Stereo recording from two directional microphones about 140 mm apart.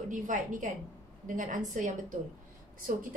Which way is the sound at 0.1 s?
65° right (ahead or behind).